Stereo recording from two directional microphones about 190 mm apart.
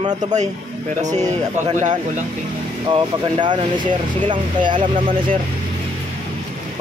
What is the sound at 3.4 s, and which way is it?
Speech, 25° right (ahead or behind).